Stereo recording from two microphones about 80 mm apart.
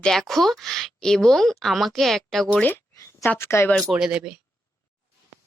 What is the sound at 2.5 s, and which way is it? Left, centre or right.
Speech, left.